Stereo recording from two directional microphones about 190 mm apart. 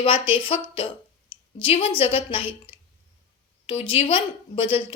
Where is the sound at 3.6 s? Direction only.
30° left (ahead or behind).